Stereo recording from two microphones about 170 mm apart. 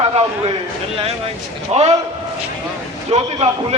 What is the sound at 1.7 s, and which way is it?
Speech, 40° right (ahead or behind).